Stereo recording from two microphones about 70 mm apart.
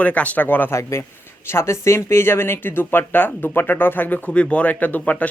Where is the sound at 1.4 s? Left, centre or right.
Left.